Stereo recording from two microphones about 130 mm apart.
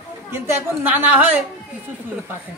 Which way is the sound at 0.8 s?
15° right (ahead or behind).